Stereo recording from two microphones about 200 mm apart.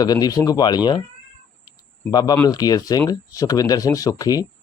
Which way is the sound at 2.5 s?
20° left (ahead or behind).